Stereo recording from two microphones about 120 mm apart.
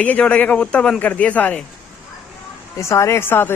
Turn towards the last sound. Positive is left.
turn(degrees=20)  # may be behind; listen again after turning